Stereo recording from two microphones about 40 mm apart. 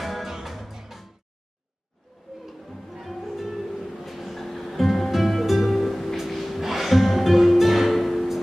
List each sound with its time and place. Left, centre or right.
0.0 s music: centre
2.9 s music: centre